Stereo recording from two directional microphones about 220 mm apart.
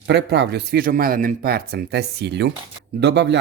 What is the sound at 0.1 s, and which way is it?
Speech, 50° right (ahead or behind).